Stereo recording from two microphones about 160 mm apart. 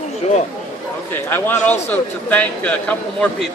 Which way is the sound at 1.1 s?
10° left (ahead or behind).